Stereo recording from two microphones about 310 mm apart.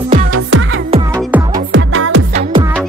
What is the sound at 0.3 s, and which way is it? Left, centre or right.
Music, right.